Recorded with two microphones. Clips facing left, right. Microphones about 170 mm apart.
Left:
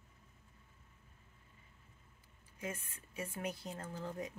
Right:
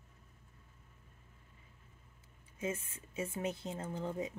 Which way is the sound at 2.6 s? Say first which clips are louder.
Right 5 dB; 25° right (ahead or behind).